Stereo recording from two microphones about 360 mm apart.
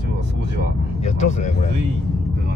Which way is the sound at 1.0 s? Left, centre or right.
Centre.